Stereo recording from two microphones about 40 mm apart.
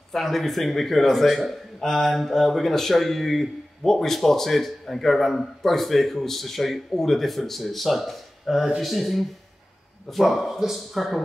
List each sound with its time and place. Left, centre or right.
0.1 s a man's voice: centre